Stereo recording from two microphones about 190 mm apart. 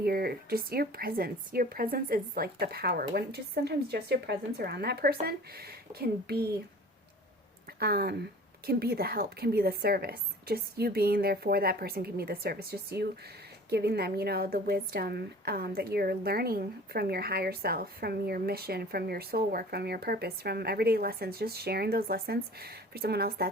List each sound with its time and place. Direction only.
0.0 s a woman's voice: 55° right (ahead or behind)
7.8 s a woman's voice: 55° right (ahead or behind)